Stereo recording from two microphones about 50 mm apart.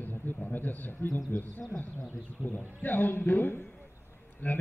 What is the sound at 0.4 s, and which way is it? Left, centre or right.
Speech, left.